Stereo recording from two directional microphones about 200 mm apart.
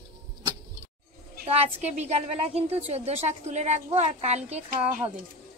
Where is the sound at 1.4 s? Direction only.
30° right (ahead or behind).